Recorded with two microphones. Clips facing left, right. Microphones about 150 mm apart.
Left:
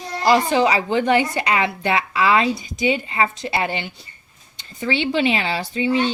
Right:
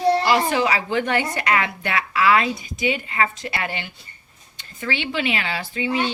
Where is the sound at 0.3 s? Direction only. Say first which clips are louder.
Left 3 dB; 25° left (ahead or behind).